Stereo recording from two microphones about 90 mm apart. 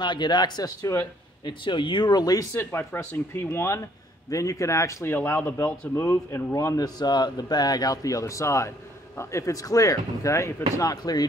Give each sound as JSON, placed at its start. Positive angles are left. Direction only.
{"t": 0.0, "sound": "speech", "side_deg": 60}
{"t": 0.9, "sound": "speech", "side_deg": 35}
{"t": 1.4, "sound": "speech", "side_deg": 65}
{"t": 2.5, "sound": "speech", "side_deg": 25}